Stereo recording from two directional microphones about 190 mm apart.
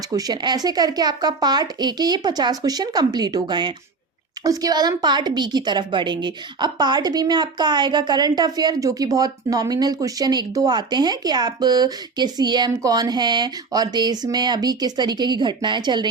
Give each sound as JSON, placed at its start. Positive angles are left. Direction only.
{"t": 0.1, "sound": "a woman's voice", "side_deg": -20}